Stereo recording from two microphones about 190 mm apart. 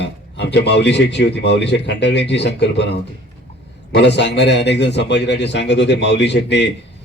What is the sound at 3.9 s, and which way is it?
A man's voice, 65° left (ahead or behind).